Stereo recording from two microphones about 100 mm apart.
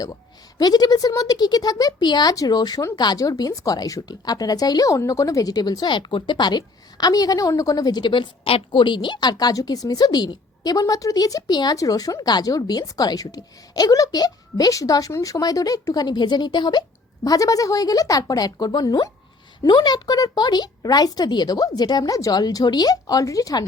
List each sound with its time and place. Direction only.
0.6 s a woman's voice: 40° left (ahead or behind)